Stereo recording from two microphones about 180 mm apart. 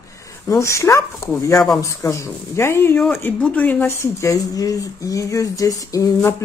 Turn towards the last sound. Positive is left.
turn(degrees=15)  # may be behind; listen again after turning